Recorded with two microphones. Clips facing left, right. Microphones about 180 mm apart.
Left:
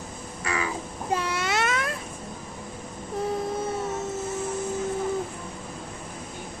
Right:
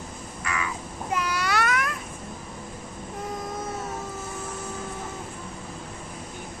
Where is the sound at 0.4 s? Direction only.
30° left (ahead or behind).